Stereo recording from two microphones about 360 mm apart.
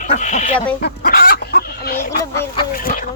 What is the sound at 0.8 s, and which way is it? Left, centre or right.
Chicken, left.